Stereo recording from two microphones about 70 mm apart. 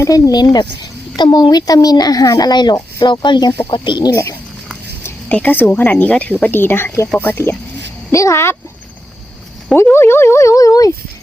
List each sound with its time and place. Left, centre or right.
0.3 s a child's voice: left
4.1 s speech: left
5.3 s speech: left
8.1 s speech: left
9.9 s speech: left